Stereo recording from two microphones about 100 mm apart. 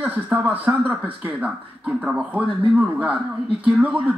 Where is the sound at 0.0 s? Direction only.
20° right (ahead or behind).